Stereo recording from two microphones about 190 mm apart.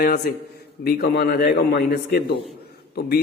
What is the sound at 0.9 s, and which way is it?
A man's voice, 55° left (ahead or behind).